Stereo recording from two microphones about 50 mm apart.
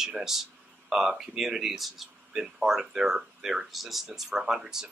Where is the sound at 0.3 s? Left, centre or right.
Centre.